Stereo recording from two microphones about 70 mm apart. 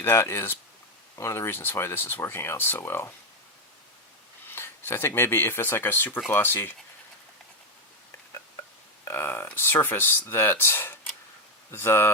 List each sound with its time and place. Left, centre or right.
0.0 s speech: left
4.4 s speech: left
9.0 s speech: left